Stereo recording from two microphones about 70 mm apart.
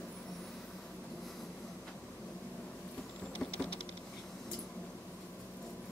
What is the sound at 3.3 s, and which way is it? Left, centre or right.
Patter, centre.